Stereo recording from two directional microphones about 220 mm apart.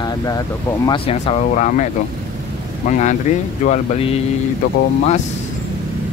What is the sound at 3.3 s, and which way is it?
Speech, 35° left (ahead or behind).